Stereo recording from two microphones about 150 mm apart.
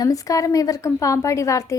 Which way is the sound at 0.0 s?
25° left (ahead or behind).